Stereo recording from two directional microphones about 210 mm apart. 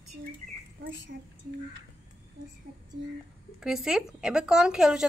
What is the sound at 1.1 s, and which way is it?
Speech, 50° right (ahead or behind).